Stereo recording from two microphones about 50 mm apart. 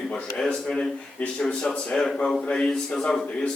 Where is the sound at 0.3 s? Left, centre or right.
Centre.